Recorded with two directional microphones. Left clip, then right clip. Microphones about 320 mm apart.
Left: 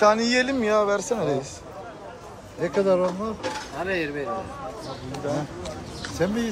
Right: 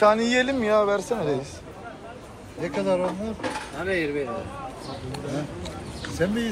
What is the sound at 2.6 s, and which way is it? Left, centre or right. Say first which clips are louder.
Speech: left 3 dB; left.